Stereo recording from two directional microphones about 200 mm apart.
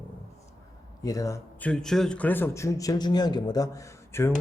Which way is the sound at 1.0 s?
15° left (ahead or behind).